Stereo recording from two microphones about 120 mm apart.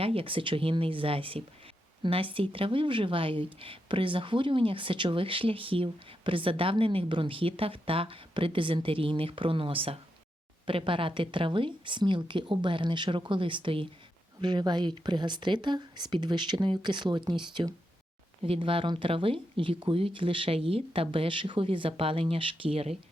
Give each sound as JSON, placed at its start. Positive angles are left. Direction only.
{"t": 0.0, "sound": "speech", "side_deg": -50}
{"t": 18.4, "sound": "speech", "side_deg": -50}